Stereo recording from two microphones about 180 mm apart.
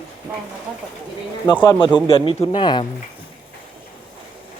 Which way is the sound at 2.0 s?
30° left (ahead or behind).